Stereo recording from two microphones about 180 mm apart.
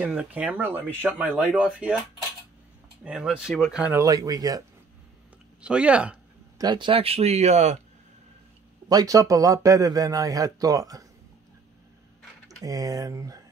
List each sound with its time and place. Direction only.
0.0 s speech: 5° right (ahead or behind)
3.0 s speech: 5° right (ahead or behind)
4.0 s speech: 20° right (ahead or behind)
5.6 s speech: 5° right (ahead or behind)
6.6 s speech: 25° right (ahead or behind)
8.8 s speech: 20° right (ahead or behind)
12.6 s speech: 20° right (ahead or behind)